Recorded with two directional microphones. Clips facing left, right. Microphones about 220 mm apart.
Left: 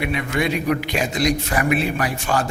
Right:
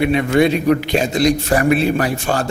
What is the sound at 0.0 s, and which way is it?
A man's voice, 30° right (ahead or behind).